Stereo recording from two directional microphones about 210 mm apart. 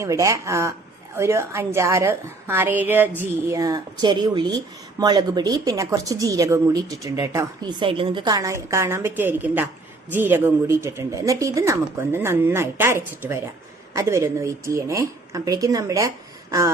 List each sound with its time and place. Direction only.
0.0 s speech: 15° right (ahead or behind)